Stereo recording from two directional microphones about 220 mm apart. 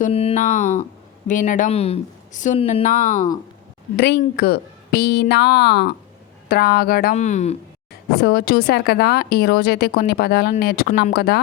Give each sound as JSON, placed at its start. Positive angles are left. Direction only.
{"t": 0.0, "sound": "speech", "side_deg": 25}
{"t": 3.9, "sound": "a woman's voice", "side_deg": 50}
{"t": 8.2, "sound": "a woman's voice", "side_deg": 45}